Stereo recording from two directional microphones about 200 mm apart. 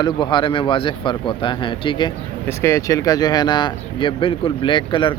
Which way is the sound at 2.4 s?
15° left (ahead or behind).